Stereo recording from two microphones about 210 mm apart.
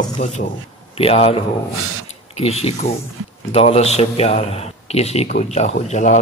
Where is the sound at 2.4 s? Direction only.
30° left (ahead or behind).